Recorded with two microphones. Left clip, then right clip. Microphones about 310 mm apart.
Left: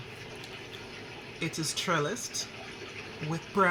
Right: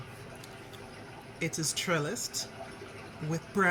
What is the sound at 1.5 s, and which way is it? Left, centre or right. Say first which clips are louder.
Speech: left 2 dB; centre.